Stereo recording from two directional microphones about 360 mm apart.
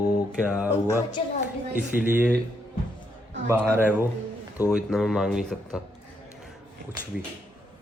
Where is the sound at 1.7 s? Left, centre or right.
Centre.